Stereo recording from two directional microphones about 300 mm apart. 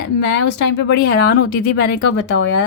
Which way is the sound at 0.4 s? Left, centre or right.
Left.